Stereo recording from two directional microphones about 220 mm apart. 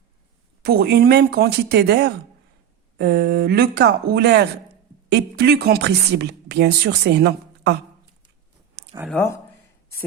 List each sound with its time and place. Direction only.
0.6 s a woman's voice: 45° right (ahead or behind)
9.0 s speech: 10° left (ahead or behind)